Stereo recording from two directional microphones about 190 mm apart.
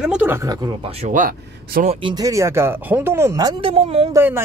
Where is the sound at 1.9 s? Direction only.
25° right (ahead or behind).